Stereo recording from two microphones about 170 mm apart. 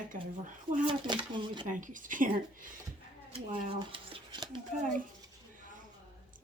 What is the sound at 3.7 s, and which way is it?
Speech, 30° right (ahead or behind).